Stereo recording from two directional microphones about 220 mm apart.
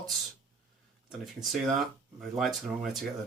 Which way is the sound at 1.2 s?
Centre (ahead or behind).